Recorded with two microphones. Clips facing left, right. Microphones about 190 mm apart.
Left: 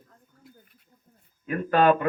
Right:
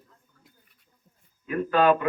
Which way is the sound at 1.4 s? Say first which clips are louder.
Even; 50° left (ahead or behind).